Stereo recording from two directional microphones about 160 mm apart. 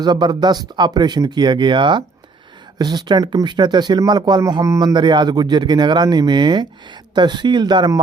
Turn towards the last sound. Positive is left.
turn(degrees=-25)  # may be behind; listen again after turning